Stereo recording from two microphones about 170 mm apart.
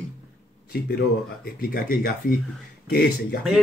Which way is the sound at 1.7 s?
60° left (ahead or behind).